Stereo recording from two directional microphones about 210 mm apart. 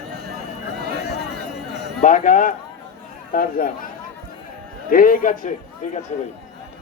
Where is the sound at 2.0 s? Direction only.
35° left (ahead or behind).